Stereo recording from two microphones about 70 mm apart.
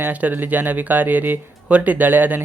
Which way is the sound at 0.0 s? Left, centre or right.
Right.